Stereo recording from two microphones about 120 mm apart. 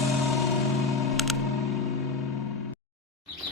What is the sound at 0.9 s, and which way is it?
Music, centre (ahead or behind).